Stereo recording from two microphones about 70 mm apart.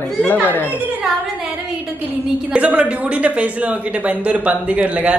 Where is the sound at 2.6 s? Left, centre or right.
Centre.